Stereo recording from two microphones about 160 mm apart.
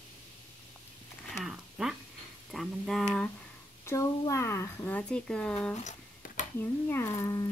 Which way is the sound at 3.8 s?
20° left (ahead or behind).